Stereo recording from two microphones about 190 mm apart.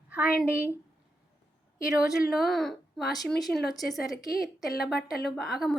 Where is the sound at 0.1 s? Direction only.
5° right (ahead or behind).